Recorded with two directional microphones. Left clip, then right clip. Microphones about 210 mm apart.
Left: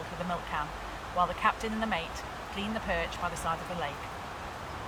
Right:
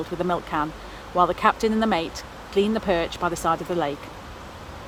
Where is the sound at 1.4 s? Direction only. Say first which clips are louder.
Right 9 dB; 30° right (ahead or behind).